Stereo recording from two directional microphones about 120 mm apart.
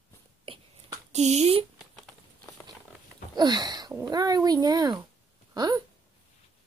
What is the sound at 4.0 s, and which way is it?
Speech, 35° right (ahead or behind).